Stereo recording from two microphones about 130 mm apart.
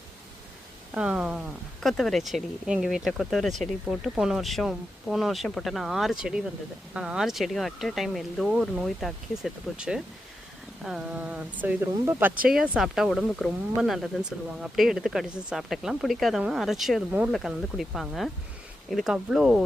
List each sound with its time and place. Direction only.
0.9 s speech: 5° right (ahead or behind)
12.5 s speech: 5° right (ahead or behind)
17.1 s speech: 10° right (ahead or behind)
17.3 s speech: centre (ahead or behind)